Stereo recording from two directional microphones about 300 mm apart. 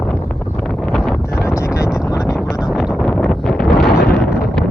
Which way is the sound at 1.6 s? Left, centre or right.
Centre.